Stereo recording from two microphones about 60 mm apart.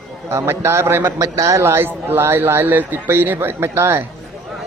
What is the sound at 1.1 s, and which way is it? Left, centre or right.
Speech, right.